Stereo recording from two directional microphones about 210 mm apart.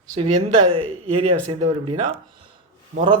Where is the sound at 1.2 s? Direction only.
30° right (ahead or behind).